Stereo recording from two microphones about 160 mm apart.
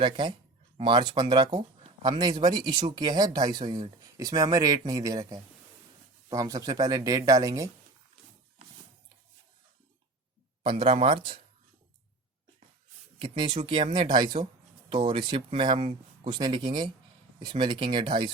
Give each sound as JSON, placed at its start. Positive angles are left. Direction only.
{"t": 0.0, "sound": "speech", "side_deg": -30}
{"t": 10.6, "sound": "speech", "side_deg": -35}
{"t": 13.1, "sound": "speech", "side_deg": -30}